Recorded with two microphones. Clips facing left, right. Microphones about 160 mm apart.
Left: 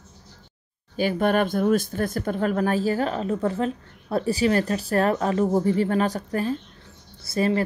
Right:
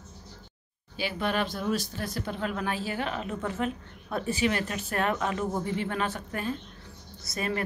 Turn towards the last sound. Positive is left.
turn(degrees=30)  # may be behind; listen again after turning